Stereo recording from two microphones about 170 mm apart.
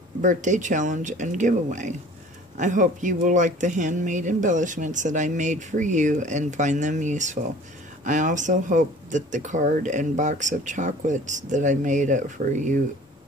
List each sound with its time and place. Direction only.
0.2 s speech: 45° right (ahead or behind)